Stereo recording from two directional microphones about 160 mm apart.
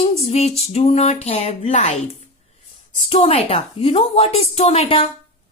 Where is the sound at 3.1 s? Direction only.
35° left (ahead or behind).